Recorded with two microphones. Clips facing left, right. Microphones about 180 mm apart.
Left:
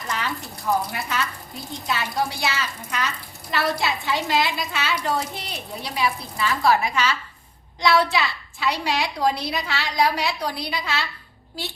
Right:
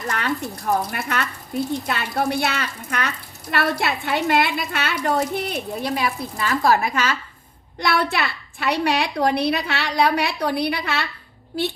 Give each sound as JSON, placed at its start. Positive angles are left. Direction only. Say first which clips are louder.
{"t": 0.1, "sound": "speech", "louder": "right 3 dB", "side_deg": -60}
{"t": 7.8, "sound": "speech", "louder": "left 2 dB", "side_deg": -60}